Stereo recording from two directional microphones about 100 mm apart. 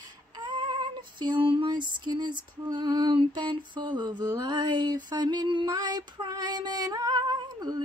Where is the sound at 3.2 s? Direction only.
50° right (ahead or behind).